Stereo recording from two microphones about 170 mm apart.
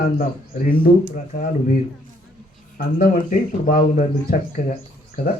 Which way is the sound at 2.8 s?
60° left (ahead or behind).